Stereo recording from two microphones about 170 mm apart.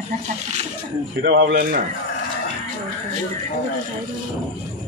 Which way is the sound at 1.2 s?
90° right.